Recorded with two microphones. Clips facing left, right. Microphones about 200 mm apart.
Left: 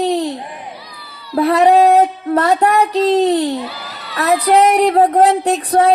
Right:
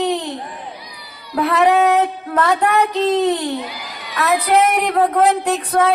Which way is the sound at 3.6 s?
15° right (ahead or behind).